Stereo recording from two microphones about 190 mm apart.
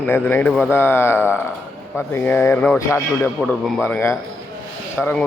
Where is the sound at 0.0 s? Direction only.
10° left (ahead or behind).